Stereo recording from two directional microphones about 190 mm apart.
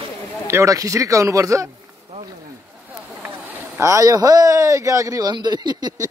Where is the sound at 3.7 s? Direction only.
15° right (ahead or behind).